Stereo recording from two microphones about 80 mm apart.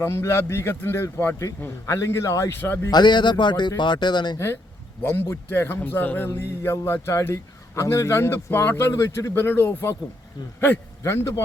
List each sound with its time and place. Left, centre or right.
0.0 s a man's voice: left
2.9 s speech: left
5.0 s a man's voice: left